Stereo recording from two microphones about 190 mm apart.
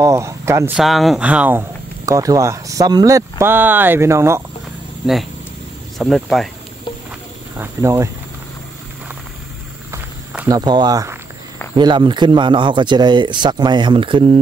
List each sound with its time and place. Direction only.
0.0 s speech: 15° right (ahead or behind)
0.7 s speech: centre (ahead or behind)
5.9 s speech: centre (ahead or behind)
7.5 s speech: 10° right (ahead or behind)
9.8 s a sound: 10° right (ahead or behind)
10.6 s speech: 20° right (ahead or behind)